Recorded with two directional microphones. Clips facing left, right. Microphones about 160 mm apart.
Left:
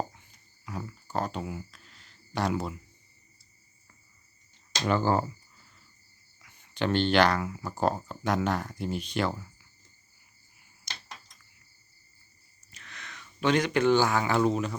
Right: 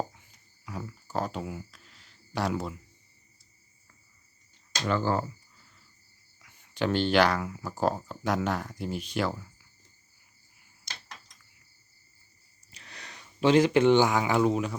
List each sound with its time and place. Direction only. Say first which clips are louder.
0.1 s cricket: left 1 dB; centre (ahead or behind)
4.9 s speech: left 2 dB; 15° left (ahead or behind)
6.4 s speech: right 1 dB; 5° right (ahead or behind)
12.7 s speech: even; 35° right (ahead or behind); by 14.8 s 10° right (ahead or behind)